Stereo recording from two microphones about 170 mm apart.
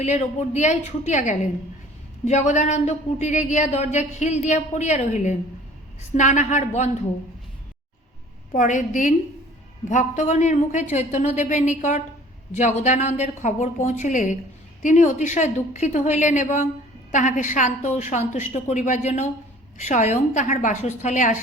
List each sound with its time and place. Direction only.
0.0 s speech: 40° left (ahead or behind)
8.5 s speech: 45° left (ahead or behind)